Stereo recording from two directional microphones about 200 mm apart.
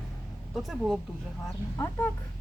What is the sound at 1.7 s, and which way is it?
Speech, 10° left (ahead or behind).